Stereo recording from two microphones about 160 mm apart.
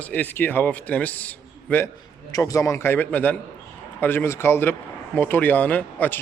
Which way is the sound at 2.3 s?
20° left (ahead or behind).